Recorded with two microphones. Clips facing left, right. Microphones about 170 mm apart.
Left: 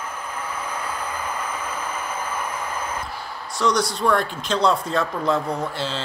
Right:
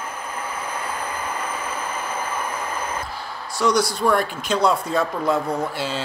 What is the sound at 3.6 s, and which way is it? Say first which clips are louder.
Speech: right 2 dB; 5° right (ahead or behind).